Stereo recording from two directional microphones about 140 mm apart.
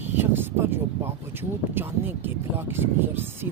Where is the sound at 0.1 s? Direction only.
15° right (ahead or behind).